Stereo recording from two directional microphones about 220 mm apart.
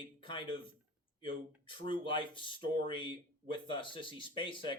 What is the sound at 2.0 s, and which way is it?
Speech, 20° left (ahead or behind).